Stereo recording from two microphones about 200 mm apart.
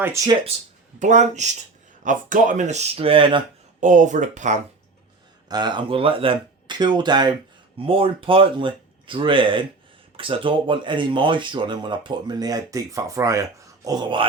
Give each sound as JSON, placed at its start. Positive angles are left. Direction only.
{"t": 0.0, "sound": "speech", "side_deg": -15}
{"t": 0.9, "sound": "speech", "side_deg": -35}
{"t": 3.8, "sound": "speech", "side_deg": -40}
{"t": 5.5, "sound": "speech", "side_deg": -20}